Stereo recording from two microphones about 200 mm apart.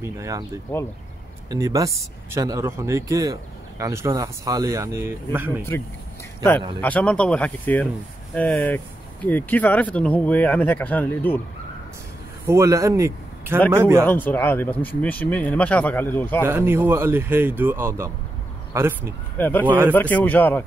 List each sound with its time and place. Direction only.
0.0 s speech: 15° right (ahead or behind)
1.5 s speech: 15° right (ahead or behind)
5.7 s speech: 10° left (ahead or behind)
12.4 s a man's voice: 15° right (ahead or behind)
14.0 s speech: 10° left (ahead or behind)
16.4 s speech: 10° right (ahead or behind)
19.3 s speech: 10° left (ahead or behind)
19.6 s speech: 10° right (ahead or behind)
19.9 s speech: 10° left (ahead or behind)